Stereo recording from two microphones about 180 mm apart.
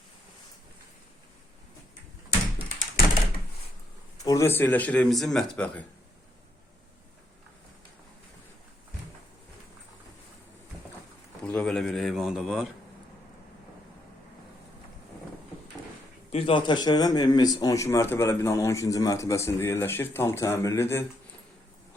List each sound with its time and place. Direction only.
4.2 s speech: 20° left (ahead or behind)
11.4 s a sound: 5° left (ahead or behind)
16.3 s speech: 30° left (ahead or behind)